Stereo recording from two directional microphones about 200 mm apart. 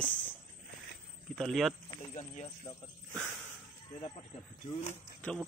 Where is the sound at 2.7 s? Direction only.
15° left (ahead or behind).